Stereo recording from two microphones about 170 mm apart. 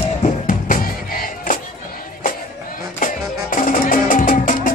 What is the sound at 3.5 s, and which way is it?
Music, 50° left (ahead or behind).